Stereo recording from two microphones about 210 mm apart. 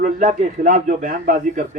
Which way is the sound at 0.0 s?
35° right (ahead or behind).